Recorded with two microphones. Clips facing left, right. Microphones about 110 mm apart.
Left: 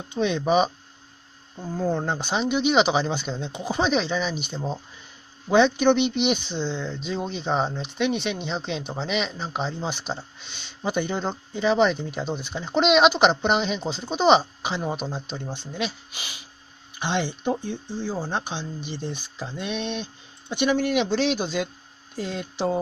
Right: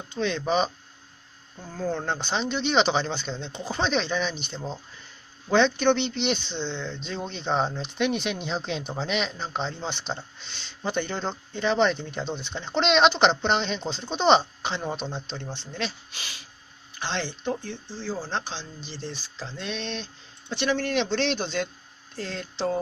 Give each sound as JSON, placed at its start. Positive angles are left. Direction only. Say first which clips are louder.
{"t": 0.1, "sound": "speech", "louder": "left 4 dB", "side_deg": 15}